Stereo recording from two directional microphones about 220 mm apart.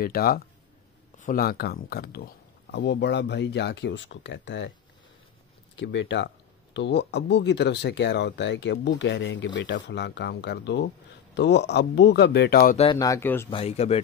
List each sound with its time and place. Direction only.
0.0 s speech: 40° left (ahead or behind)
5.8 s speech: 55° left (ahead or behind)
12.7 s speech: 20° left (ahead or behind)
13.5 s speech: 25° left (ahead or behind)